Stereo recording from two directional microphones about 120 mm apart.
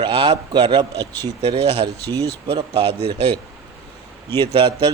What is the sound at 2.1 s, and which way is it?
Mantra, 35° right (ahead or behind).